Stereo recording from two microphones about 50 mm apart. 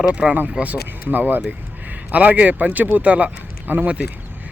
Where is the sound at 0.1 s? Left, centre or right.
Right.